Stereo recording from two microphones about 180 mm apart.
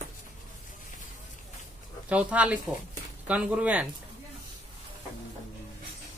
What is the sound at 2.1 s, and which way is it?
Speech, 5° right (ahead or behind).